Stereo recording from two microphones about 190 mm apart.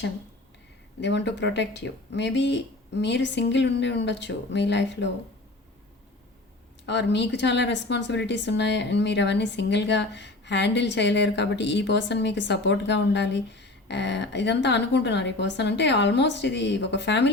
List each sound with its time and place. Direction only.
1.0 s speech: 65° left (ahead or behind)
6.8 s speech: 65° left (ahead or behind)